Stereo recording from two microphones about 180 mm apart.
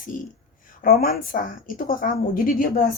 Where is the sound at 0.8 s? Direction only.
55° left (ahead or behind).